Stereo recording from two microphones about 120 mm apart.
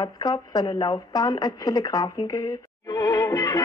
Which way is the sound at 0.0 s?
35° left (ahead or behind).